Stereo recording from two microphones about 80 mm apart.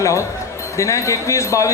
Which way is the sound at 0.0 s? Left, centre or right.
Left.